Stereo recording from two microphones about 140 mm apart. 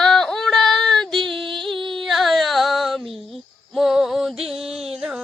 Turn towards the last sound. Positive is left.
turn(degrees=-5)  # may be behind; listen again after turning